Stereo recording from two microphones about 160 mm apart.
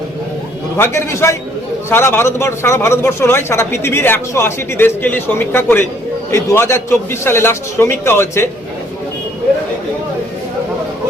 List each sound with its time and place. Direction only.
0.8 s a man's voice: 15° left (ahead or behind)